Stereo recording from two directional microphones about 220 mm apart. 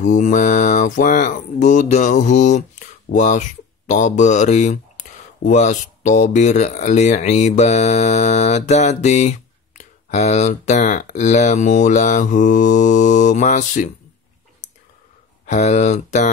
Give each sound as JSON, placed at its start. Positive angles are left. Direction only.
{"t": 0.0, "sound": "speech", "side_deg": 35}
{"t": 15.4, "sound": "speech", "side_deg": 30}